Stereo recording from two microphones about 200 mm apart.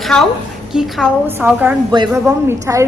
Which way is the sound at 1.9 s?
20° right (ahead or behind).